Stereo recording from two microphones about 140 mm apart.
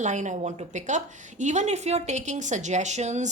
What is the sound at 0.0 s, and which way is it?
A woman's voice, 60° right (ahead or behind).